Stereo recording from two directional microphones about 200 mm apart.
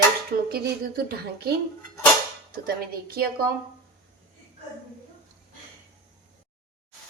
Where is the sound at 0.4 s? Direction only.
50° right (ahead or behind).